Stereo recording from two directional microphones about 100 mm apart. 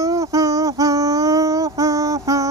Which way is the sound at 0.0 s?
35° right (ahead or behind).